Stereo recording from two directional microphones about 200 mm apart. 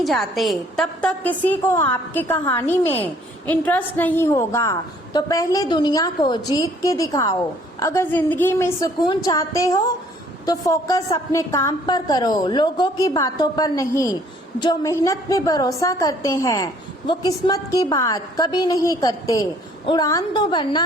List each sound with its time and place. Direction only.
0.0 s a woman's voice: centre (ahead or behind); by 20.8 s 20° left (ahead or behind)